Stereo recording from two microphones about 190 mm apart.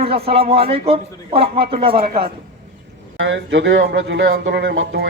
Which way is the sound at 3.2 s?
75° right (ahead or behind).